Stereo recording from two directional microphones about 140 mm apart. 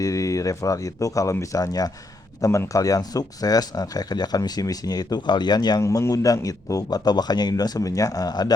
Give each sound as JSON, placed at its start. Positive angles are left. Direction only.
{"t": 0.0, "sound": "speech", "side_deg": 25}